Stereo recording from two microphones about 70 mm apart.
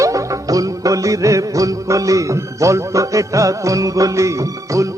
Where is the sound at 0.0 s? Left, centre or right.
Right.